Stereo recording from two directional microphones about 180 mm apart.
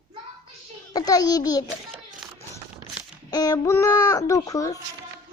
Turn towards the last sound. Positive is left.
turn(degrees=20)  # may be behind; listen again after turning